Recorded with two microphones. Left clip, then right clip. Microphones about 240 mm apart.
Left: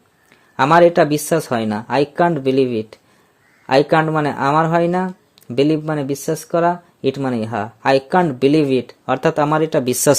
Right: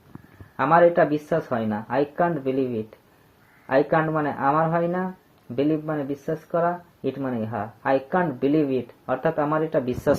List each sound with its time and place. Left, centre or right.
0.5 s speech: left
3.7 s speech: left